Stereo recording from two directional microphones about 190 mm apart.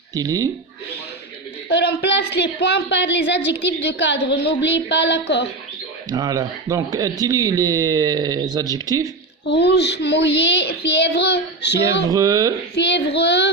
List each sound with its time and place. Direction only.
0.1 s speech: 20° right (ahead or behind)
1.7 s a woman's voice: 60° left (ahead or behind)
6.1 s speech: 20° right (ahead or behind)
9.5 s a woman's voice: 65° left (ahead or behind)
12.0 s speech: 20° right (ahead or behind)
12.7 s a woman's voice: 65° left (ahead or behind)